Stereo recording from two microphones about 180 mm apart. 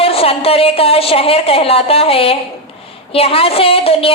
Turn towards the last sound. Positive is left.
turn(degrees=30)  # may be behind; listen again after turning